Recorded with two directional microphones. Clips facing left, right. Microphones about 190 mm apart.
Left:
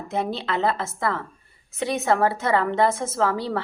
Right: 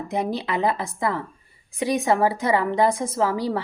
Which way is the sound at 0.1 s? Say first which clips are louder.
Even; 15° right (ahead or behind).